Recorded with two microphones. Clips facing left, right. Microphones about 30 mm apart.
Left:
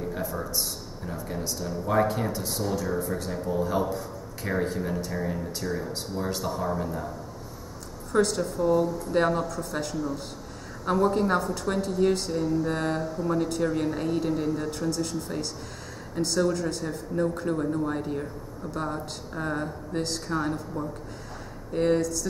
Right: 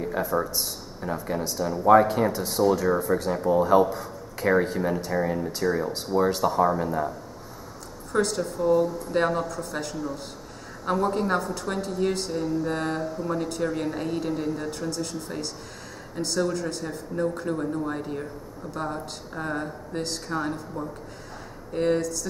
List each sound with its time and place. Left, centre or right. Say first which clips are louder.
0.0 s a sound: right 4 dB; right
1.0 s speech: right 6 dB; right
1.5 s speech: right 10 dB; centre
8.1 s speech: left 1 dB; centre